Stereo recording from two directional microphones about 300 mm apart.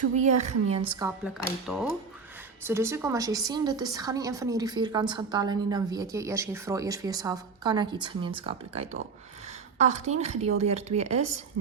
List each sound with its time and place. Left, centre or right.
0.2 s a woman's voice: right
0.9 s a woman's voice: centre